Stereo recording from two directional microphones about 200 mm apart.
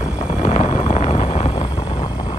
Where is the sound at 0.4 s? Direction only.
30° left (ahead or behind).